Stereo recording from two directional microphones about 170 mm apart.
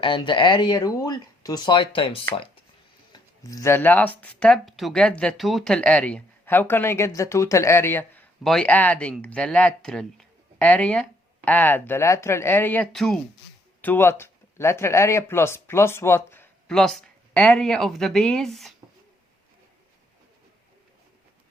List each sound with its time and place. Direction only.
0.0 s speech: 30° left (ahead or behind)
3.1 s speech: 20° left (ahead or behind); by 13.1 s 5° left (ahead or behind)
13.8 s speech: 15° left (ahead or behind)